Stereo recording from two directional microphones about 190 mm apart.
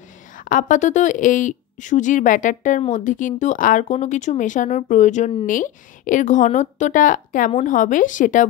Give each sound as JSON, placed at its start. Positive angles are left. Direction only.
{"t": 0.4, "sound": "a woman's voice", "side_deg": 45}